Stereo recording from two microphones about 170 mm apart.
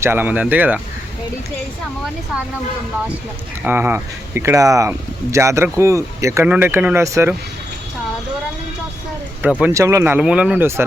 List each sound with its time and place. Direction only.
0.0 s speech: 10° right (ahead or behind)
3.6 s speech: 10° right (ahead or behind)
9.4 s speech: 10° right (ahead or behind)